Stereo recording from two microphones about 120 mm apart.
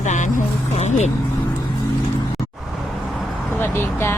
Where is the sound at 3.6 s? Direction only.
20° left (ahead or behind).